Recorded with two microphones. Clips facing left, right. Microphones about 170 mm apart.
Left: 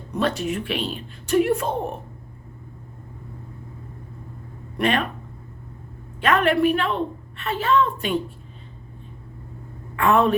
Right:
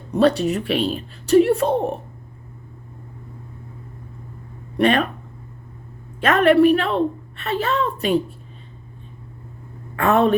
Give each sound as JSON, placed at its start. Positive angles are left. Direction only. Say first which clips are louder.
{"t": 0.1, "sound": "speech", "louder": "right 7 dB", "side_deg": -35}
{"t": 4.8, "sound": "speech", "louder": "right 5 dB", "side_deg": -40}
{"t": 6.1, "sound": "speech", "louder": "right 5 dB", "side_deg": -40}
{"t": 9.9, "sound": "a woman's voice", "louder": "right 2 dB", "side_deg": -40}